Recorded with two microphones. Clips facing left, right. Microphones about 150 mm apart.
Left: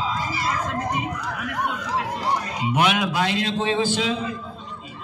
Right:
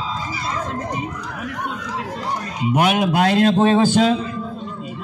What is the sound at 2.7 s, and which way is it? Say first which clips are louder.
A man's voice: right 4 dB; 45° right (ahead or behind).